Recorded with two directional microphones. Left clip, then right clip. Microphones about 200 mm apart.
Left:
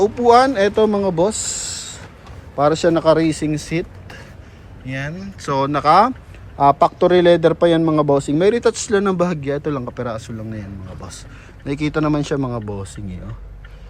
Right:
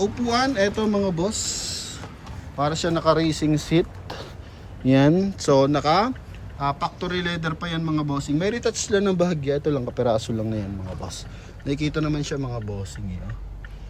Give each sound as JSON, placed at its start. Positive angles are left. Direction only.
{"t": 0.0, "sound": "a man's voice", "side_deg": 0}
{"t": 4.9, "sound": "speech", "side_deg": -30}
{"t": 5.5, "sound": "speech", "side_deg": -15}
{"t": 6.6, "sound": "a man's voice", "side_deg": 15}